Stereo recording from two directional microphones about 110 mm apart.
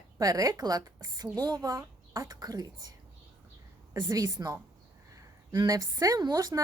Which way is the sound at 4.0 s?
35° right (ahead or behind).